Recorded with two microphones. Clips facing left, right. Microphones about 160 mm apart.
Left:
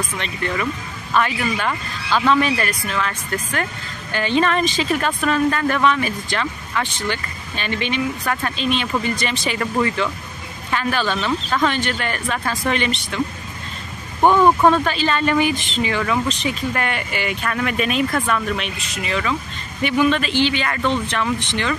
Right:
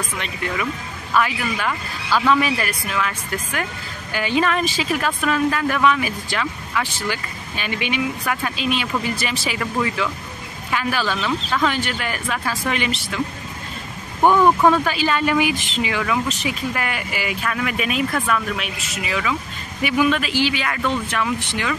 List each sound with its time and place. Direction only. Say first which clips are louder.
0.2 s a woman's voice: left 2 dB; 5° right (ahead or behind)
14.2 s speech: left 1 dB; 15° left (ahead or behind)
14.7 s a woman's voice: even; 10° right (ahead or behind)